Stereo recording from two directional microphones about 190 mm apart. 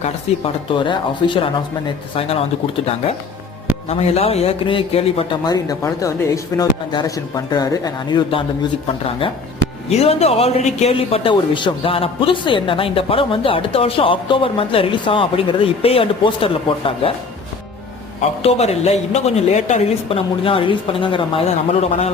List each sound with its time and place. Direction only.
0.0 s a man's voice: 30° left (ahead or behind)
2.8 s a man's voice: 30° left (ahead or behind)
18.4 s speech: 35° left (ahead or behind)